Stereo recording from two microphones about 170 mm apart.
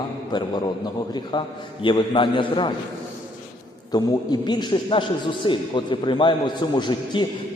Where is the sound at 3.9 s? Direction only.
25° left (ahead or behind).